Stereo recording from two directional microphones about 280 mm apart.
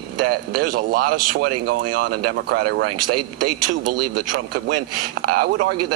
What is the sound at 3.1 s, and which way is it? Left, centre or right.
Speech, right.